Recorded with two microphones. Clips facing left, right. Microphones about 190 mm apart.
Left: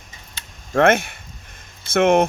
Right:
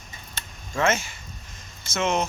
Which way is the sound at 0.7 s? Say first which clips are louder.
Left 8 dB; 60° left (ahead or behind).